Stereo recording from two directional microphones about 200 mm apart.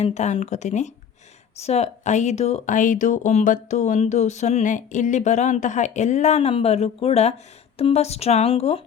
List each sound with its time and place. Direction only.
0.0 s speech: 35° left (ahead or behind)